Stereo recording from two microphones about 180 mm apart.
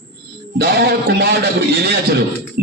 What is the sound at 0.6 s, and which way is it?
A man's voice, 60° right (ahead or behind).